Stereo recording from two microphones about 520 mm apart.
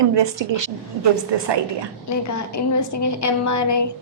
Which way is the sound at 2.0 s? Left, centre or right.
Left.